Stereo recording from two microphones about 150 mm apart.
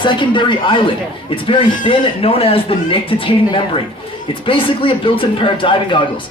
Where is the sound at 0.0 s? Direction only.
30° left (ahead or behind).